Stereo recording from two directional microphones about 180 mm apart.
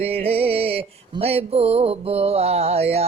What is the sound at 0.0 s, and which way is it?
Music, 35° right (ahead or behind).